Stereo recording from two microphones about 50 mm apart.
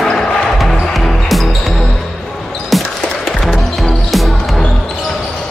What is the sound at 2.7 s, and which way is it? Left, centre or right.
Basketball bounce, centre.